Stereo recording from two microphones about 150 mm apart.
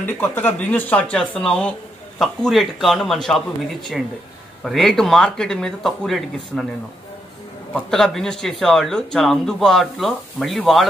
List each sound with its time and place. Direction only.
0.0 s speech: 10° left (ahead or behind)
7.7 s speech: 5° left (ahead or behind)